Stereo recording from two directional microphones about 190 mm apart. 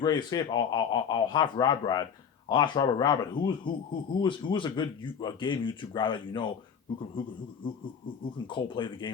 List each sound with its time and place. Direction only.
0.0 s speech: 20° left (ahead or behind)
7.6 s speech: 25° left (ahead or behind)